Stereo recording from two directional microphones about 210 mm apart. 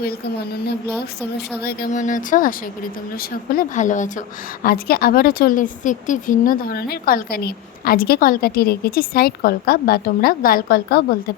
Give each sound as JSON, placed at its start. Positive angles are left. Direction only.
{"t": 1.6, "sound": "a woman's voice", "side_deg": 40}